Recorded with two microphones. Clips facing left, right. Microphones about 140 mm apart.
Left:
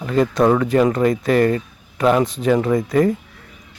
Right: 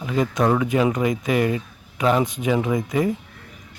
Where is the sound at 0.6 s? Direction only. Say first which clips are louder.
Left 4 dB; 10° right (ahead or behind).